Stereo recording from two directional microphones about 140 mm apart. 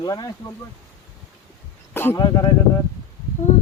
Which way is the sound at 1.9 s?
15° left (ahead or behind).